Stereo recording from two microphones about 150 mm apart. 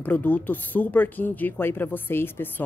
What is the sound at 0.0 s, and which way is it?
Speech, 10° left (ahead or behind).